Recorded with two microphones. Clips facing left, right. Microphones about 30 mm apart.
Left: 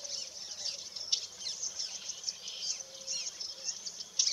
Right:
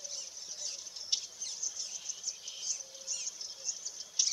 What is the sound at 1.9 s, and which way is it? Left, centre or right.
Bird, left.